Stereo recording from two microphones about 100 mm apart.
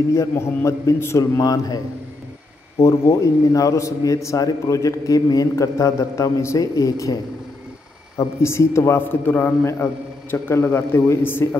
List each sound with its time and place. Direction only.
0.1 s a man's voice: 25° left (ahead or behind)
2.8 s a man's voice: 30° left (ahead or behind)
8.4 s a man's voice: 25° left (ahead or behind)